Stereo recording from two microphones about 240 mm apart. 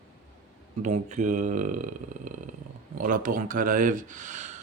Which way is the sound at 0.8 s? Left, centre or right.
Right.